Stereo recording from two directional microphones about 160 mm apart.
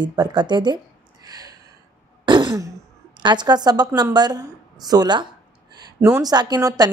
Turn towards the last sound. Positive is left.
turn(degrees=-20)  # may be behind; listen again after turning